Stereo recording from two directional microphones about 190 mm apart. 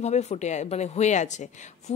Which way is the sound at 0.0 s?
35° left (ahead or behind).